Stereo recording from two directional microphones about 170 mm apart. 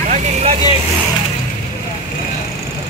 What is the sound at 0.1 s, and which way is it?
Vehicle, 40° right (ahead or behind).